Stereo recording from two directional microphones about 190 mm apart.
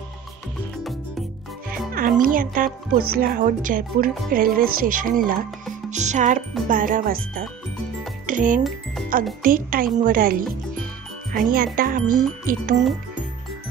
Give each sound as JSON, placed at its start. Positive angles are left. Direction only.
{"t": 2.0, "sound": "speech", "side_deg": -45}
{"t": 8.3, "sound": "a child's voice", "side_deg": -45}